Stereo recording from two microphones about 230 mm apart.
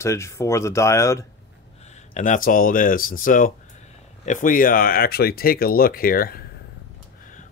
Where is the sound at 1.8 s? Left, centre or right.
Left.